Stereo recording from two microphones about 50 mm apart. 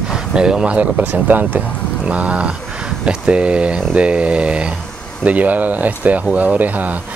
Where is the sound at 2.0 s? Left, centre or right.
Right.